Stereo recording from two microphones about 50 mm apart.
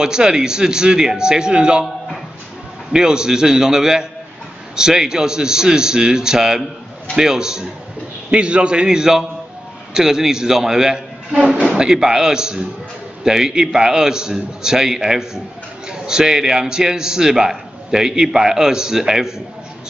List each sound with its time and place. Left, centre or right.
0.0 s a man's voice: centre
2.9 s a man's voice: centre